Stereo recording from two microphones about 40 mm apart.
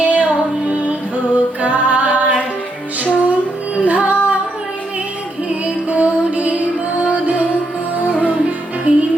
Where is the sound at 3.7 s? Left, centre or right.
Right.